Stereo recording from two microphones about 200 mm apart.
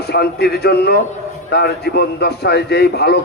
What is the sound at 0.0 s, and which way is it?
A man's voice, 55° left (ahead or behind).